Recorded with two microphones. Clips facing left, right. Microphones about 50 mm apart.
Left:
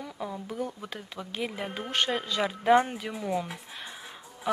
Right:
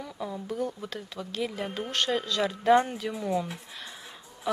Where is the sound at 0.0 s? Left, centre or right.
Centre.